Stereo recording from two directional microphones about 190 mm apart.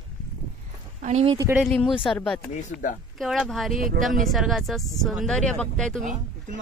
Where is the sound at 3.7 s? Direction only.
45° right (ahead or behind).